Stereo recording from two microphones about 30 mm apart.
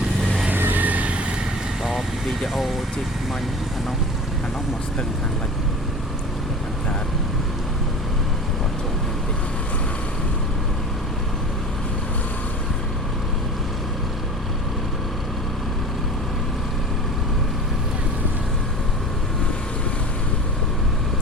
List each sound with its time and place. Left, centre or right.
0.5 s vehicle: right
1.8 s vehicle: centre